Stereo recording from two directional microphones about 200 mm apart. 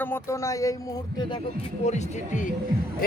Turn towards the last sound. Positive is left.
turn(degrees=45)  # may be behind; listen again after turning